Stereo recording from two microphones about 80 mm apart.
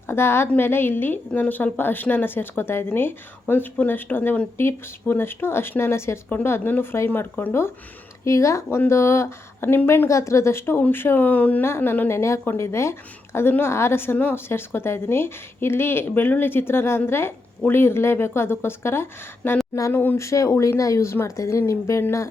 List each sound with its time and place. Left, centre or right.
0.1 s a woman's voice: left
8.2 s a woman's voice: left; by 11.6 s centre
11.6 s a woman's voice: left